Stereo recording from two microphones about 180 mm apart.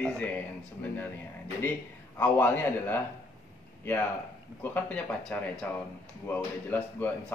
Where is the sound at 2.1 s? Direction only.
10° left (ahead or behind).